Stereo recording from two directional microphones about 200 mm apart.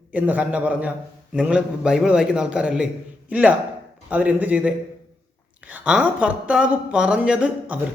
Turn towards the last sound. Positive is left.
turn(degrees=-5)  # may be behind; listen again after turning